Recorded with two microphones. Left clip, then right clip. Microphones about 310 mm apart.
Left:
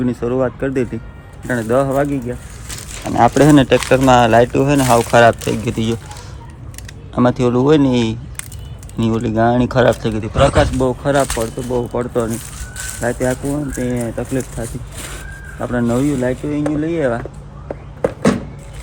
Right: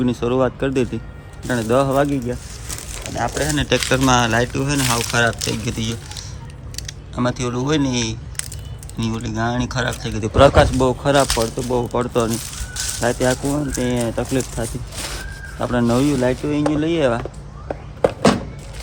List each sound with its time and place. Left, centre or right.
0.0 s speech: centre
3.5 s speech: centre
10.2 s speech: centre
10.8 s speech: centre
15.5 s speech: centre
17.7 s a sound: centre